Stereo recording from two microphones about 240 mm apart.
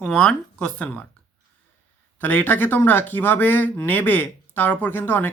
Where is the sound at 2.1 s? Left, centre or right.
Centre.